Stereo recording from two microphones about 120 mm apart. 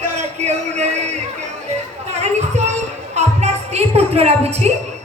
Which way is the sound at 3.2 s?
65° right (ahead or behind).